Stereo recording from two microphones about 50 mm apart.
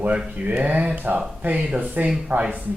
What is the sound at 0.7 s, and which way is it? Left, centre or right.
Speech, right.